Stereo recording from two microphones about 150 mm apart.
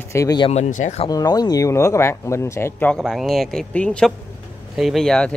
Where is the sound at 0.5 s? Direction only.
50° left (ahead or behind).